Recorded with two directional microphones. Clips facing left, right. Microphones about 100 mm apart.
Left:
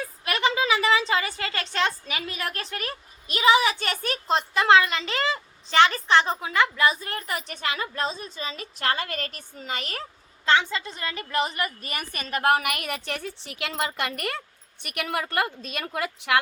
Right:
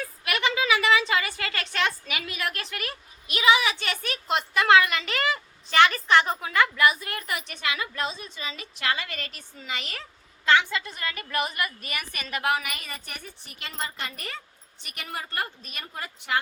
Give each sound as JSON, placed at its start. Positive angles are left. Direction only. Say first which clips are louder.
{"t": 0.0, "sound": "a woman's voice", "louder": "left 2 dB", "side_deg": 30}
{"t": 10.4, "sound": "a woman's voice", "louder": "even", "side_deg": 30}